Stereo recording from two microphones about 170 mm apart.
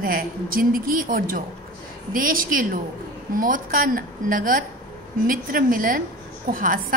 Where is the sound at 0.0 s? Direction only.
55° right (ahead or behind).